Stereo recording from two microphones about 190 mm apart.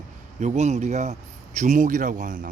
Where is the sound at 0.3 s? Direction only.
40° right (ahead or behind).